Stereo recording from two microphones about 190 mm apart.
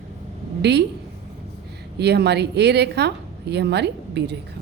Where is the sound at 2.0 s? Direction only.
60° right (ahead or behind).